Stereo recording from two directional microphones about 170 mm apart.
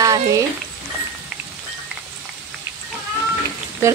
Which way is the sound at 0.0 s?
20° right (ahead or behind).